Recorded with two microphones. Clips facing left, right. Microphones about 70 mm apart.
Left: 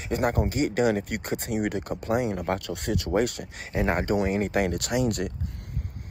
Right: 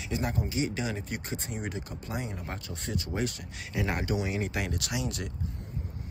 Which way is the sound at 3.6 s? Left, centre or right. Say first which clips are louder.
Left 6 dB; left.